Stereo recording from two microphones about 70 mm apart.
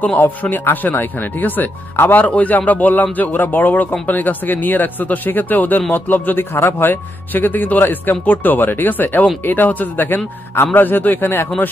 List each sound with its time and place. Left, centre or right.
0.2 s speech: left